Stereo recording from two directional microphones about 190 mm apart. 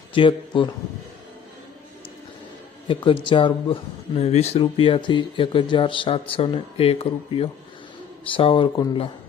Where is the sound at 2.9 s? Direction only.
25° left (ahead or behind).